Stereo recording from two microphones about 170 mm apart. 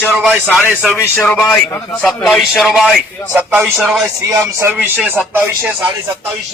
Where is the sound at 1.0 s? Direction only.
5° left (ahead or behind).